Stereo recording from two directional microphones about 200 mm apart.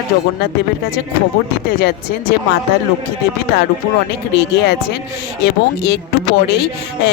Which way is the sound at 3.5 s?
55° left (ahead or behind).